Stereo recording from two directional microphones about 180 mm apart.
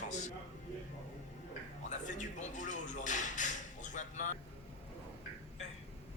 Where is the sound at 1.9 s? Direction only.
40° left (ahead or behind).